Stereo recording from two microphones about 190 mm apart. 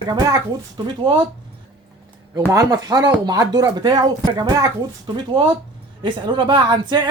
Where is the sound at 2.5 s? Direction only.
15° right (ahead or behind).